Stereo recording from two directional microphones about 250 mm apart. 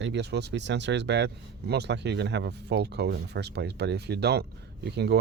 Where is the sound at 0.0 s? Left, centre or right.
Right.